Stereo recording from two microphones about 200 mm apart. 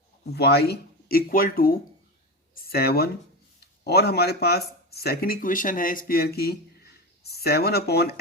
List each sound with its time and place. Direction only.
0.3 s speech: 55° left (ahead or behind)